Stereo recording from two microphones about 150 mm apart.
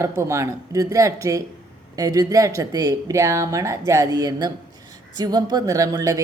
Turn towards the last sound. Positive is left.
turn(degrees=-20)  # may be behind; listen again after turning